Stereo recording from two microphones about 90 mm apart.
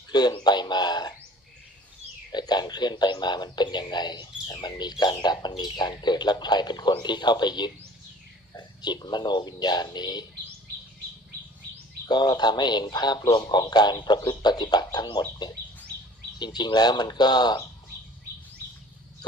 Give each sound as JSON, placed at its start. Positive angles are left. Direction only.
{"t": 0.1, "sound": "bird", "side_deg": 50}
{"t": 2.3, "sound": "speech", "side_deg": 50}
{"t": 12.0, "sound": "speech", "side_deg": 55}
{"t": 16.4, "sound": "speech", "side_deg": 55}